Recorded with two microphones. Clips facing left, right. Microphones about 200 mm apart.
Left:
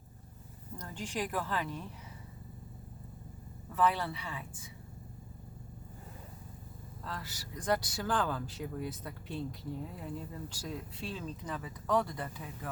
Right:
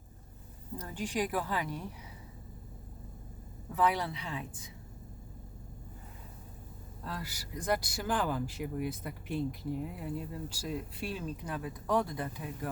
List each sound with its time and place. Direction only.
0.8 s speech: 10° right (ahead or behind)
3.8 s speech: 15° right (ahead or behind)
7.0 s speech: 15° right (ahead or behind)